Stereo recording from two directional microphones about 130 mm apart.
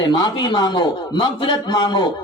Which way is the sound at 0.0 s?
35° left (ahead or behind).